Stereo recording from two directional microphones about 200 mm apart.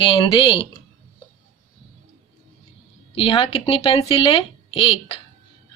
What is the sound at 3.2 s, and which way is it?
Speech, 25° left (ahead or behind).